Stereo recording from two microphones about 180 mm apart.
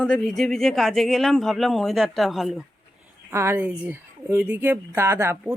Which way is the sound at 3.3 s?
15° right (ahead or behind).